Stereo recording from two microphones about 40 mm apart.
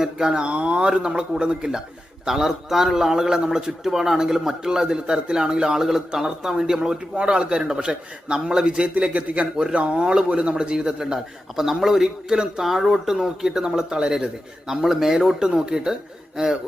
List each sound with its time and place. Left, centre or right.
0.0 s a man's voice: centre
0.4 s a man's voice: right
2.2 s a man's voice: centre; by 10.0 s right
10.0 s a man's voice: right
12.6 s a man's voice: centre
14.7 s a man's voice: centre